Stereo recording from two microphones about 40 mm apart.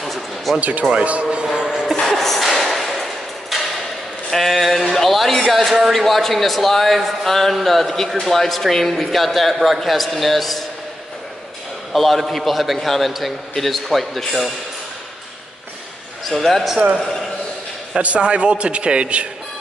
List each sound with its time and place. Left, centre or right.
0.0 s a sound: centre
0.6 s speech: right
1.4 s music: right
1.9 s a sound: centre
4.3 s speech: centre
11.9 s speech: centre
16.3 s speech: centre
18.0 s a man's voice: right